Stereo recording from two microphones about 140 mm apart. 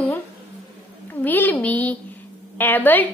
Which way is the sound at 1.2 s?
15° left (ahead or behind).